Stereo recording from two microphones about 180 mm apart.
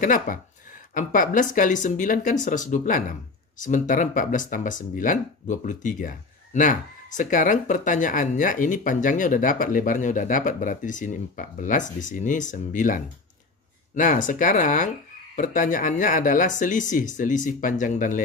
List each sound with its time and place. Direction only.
0.0 s speech: 45° left (ahead or behind)